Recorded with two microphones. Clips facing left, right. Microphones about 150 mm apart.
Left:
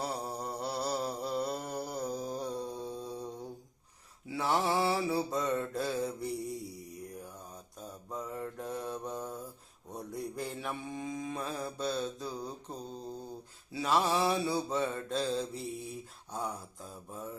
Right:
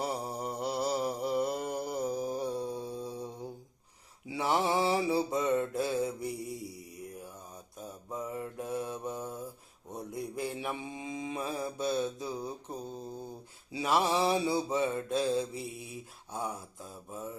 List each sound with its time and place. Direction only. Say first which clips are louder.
0.0 s mantra: right 2 dB; 15° right (ahead or behind)
4.3 s mantra: right 1 dB; 15° right (ahead or behind)
8.1 s mantra: right 2 dB; 15° right (ahead or behind)